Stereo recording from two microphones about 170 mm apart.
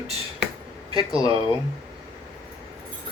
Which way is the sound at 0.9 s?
25° left (ahead or behind).